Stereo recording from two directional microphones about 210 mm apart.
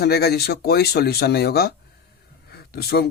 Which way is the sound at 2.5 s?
50° left (ahead or behind).